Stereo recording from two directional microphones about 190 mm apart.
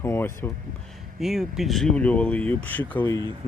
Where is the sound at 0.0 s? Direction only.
10° left (ahead or behind).